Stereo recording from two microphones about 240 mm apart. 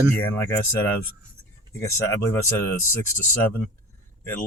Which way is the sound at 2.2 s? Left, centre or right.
Centre.